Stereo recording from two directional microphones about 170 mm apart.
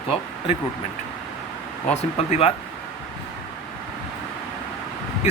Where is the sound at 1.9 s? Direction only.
40° left (ahead or behind).